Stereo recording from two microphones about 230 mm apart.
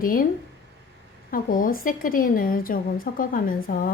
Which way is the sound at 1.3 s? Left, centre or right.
Left.